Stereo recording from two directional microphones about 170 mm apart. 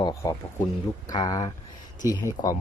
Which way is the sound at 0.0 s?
20° left (ahead or behind).